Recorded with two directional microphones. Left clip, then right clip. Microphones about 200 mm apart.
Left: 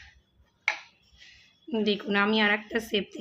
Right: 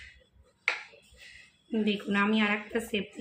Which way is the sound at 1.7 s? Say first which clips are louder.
Left 3 dB; 50° left (ahead or behind).